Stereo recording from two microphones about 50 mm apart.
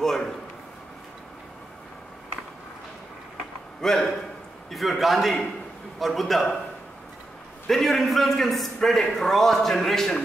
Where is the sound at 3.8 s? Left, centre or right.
Centre.